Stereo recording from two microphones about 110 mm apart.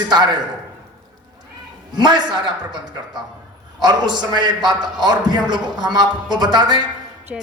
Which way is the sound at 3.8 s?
40° right (ahead or behind).